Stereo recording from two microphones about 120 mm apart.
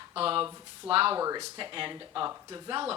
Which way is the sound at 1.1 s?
30° right (ahead or behind).